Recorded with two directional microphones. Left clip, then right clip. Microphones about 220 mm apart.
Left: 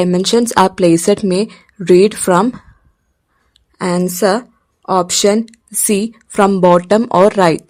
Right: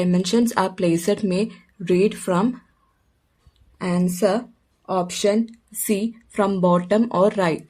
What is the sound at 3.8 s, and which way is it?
A woman's voice, 40° left (ahead or behind).